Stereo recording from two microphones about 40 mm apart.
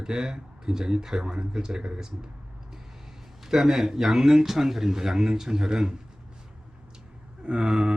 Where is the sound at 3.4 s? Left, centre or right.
Centre.